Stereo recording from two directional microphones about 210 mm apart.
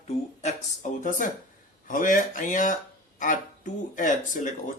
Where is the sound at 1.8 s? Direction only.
40° left (ahead or behind).